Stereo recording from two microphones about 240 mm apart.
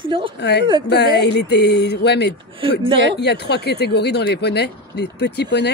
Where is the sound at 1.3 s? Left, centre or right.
Left.